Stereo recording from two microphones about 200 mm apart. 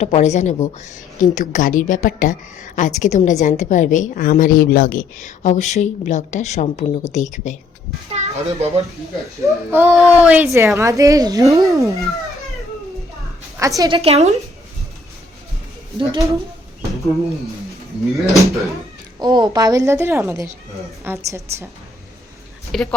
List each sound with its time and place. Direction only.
0.0 s a woman's voice: 35° left (ahead or behind)
8.1 s a child's voice: 30° right (ahead or behind)
9.4 s a child's voice: 10° right (ahead or behind)
13.6 s a woman's voice: 15° right (ahead or behind); by 14.3 s 30° right (ahead or behind)
16.0 s a child's voice: 15° right (ahead or behind)
18.1 s speech: centre (ahead or behind)
19.2 s a child's voice: 20° right (ahead or behind)
22.7 s speech: centre (ahead or behind)